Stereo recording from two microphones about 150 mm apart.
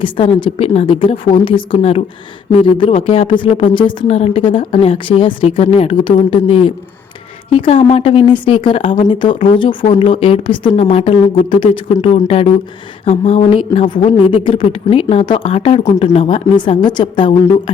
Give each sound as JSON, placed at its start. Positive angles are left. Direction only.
{"t": 0.0, "sound": "speech", "side_deg": 35}